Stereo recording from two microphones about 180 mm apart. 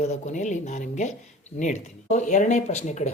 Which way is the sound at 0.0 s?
40° left (ahead or behind).